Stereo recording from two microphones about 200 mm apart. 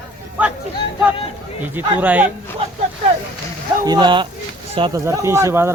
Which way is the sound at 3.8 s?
20° right (ahead or behind).